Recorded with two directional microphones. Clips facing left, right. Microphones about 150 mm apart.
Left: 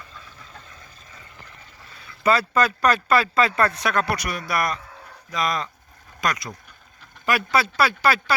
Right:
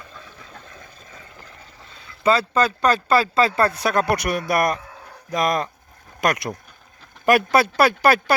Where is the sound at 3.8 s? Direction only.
45° right (ahead or behind).